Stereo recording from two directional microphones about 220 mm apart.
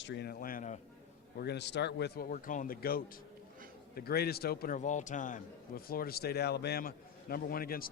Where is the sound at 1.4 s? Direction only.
50° left (ahead or behind).